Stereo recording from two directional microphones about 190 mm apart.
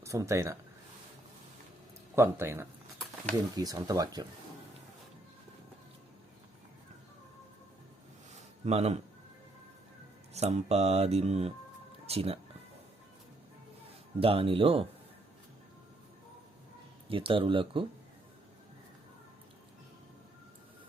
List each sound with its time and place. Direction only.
0.0 s speech: 15° right (ahead or behind)
2.1 s speech: 10° right (ahead or behind)
8.3 s a sound: 35° right (ahead or behind)
10.3 s speech: 35° right (ahead or behind)
14.2 s speech: 30° right (ahead or behind)
17.1 s speech: 25° right (ahead or behind)